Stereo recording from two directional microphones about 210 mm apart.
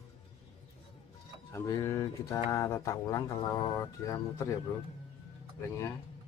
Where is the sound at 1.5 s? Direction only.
15° left (ahead or behind).